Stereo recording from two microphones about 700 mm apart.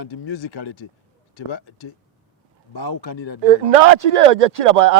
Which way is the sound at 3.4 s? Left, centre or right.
Right.